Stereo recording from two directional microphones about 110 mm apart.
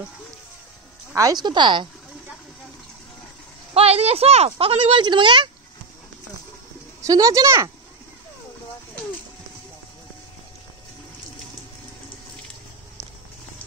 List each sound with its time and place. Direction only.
1.1 s speech: 35° right (ahead or behind)
3.7 s a woman's voice: 70° right (ahead or behind)
4.5 s speech: 55° right (ahead or behind)
7.0 s speech: 30° right (ahead or behind)